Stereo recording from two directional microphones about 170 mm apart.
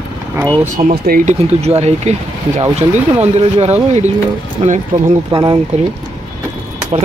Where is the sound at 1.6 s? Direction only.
40° right (ahead or behind).